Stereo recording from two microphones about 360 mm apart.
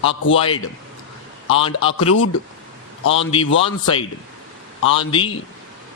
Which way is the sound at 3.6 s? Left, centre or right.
Centre.